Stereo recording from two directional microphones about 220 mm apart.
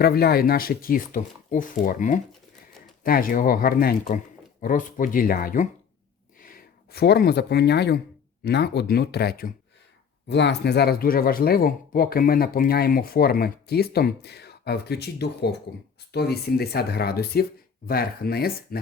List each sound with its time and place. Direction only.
0.0 s speech: 45° left (ahead or behind)